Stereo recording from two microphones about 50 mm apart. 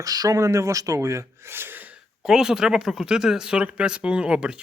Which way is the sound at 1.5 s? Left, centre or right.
Right.